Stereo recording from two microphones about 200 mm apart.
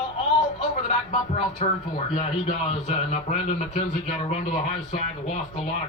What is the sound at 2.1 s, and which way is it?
Speech, 35° left (ahead or behind).